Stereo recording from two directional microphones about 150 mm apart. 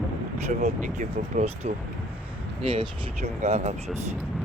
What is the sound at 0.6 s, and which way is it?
Speech, 50° right (ahead or behind).